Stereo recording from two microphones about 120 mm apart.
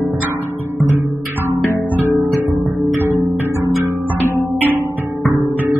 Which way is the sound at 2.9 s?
25° right (ahead or behind).